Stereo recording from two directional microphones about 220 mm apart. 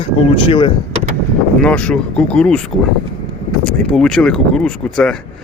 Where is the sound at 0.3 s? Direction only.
25° left (ahead or behind).